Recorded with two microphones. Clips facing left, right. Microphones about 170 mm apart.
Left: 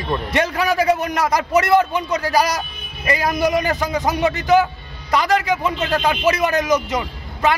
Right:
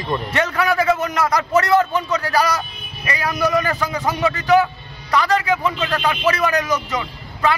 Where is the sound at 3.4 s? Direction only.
20° left (ahead or behind).